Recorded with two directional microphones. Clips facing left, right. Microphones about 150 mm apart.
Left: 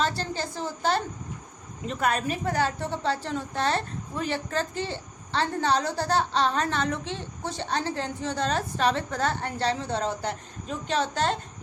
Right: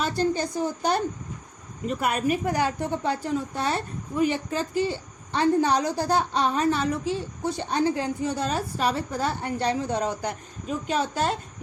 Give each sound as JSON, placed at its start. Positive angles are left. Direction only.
{"t": 0.2, "sound": "a woman's voice", "side_deg": -15}